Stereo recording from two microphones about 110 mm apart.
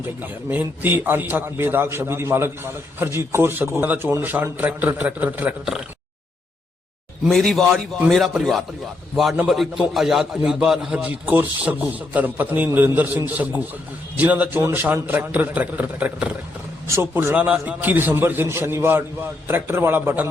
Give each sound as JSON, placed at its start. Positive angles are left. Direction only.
{"t": 0.0, "sound": "a man's voice", "side_deg": -20}
{"t": 7.3, "sound": "a man's voice", "side_deg": 5}
{"t": 16.8, "sound": "a man's voice", "side_deg": -25}